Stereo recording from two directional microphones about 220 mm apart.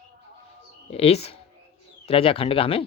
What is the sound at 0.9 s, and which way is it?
Speech, 30° left (ahead or behind).